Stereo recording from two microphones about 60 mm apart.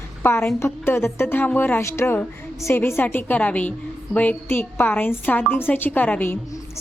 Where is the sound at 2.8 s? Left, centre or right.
Left.